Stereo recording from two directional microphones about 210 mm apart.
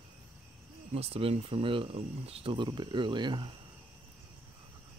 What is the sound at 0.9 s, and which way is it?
Speech, 30° right (ahead or behind).